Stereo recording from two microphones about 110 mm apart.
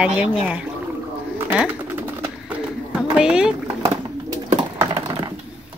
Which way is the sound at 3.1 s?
10° right (ahead or behind).